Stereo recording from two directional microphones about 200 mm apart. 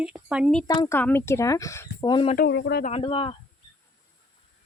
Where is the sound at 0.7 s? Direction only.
15° left (ahead or behind).